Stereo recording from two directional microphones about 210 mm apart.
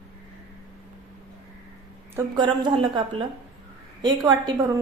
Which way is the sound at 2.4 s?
20° right (ahead or behind).